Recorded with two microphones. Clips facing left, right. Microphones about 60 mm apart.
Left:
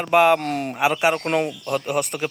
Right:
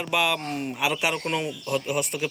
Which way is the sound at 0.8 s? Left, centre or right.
Left.